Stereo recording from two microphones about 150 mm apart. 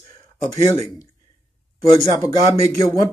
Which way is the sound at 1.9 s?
20° left (ahead or behind).